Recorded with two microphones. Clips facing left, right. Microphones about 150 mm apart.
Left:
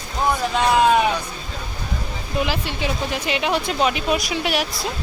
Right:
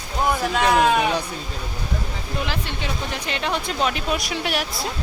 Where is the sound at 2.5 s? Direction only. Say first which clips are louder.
Left 4 dB; 5° left (ahead or behind).